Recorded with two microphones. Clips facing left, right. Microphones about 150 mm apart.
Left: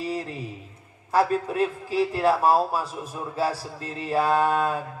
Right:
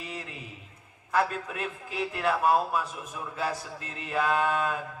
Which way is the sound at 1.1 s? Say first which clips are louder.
Left 6 dB; 35° left (ahead or behind).